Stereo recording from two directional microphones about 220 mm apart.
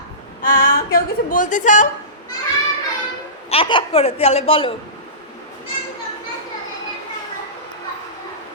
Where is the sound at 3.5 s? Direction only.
25° left (ahead or behind).